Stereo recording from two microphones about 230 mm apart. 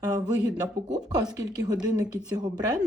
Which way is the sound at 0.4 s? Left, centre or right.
Centre.